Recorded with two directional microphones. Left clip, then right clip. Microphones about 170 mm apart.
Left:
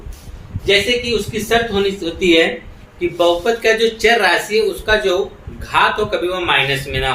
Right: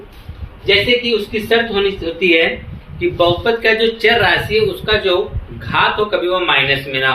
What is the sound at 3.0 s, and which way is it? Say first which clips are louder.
A man's voice: right 1 dB; 10° left (ahead or behind).